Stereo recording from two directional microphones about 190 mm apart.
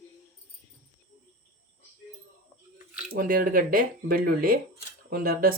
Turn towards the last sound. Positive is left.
turn(degrees=-50)  # may be behind; listen again after turning